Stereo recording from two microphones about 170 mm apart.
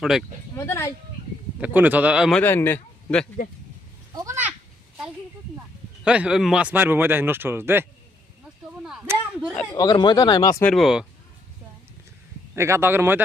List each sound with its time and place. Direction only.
0.0 s speech: centre (ahead or behind)
0.5 s speech: 15° left (ahead or behind)
1.6 s speech: 10° right (ahead or behind)
2.4 s a man's voice: 10° left (ahead or behind)
4.1 s a sound: 20° right (ahead or behind)
6.1 s speech: 5° right (ahead or behind)
9.7 s speech: 25° left (ahead or behind)
10.6 s speech: centre (ahead or behind)
12.5 s speech: 15° right (ahead or behind)